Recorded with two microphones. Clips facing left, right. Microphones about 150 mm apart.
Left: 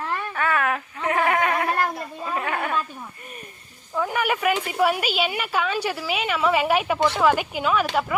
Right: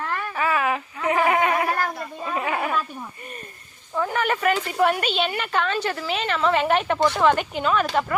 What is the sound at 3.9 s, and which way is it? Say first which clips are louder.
Speech: even; 5° left (ahead or behind).